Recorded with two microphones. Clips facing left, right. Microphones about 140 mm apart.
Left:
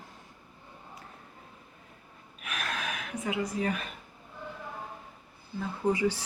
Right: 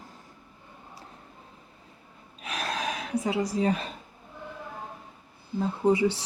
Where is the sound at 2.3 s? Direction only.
35° right (ahead or behind).